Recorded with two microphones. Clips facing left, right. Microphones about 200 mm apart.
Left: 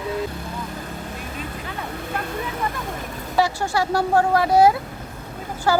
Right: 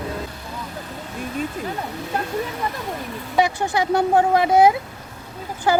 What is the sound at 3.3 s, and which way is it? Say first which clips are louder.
Speech: right 1 dB; 20° right (ahead or behind).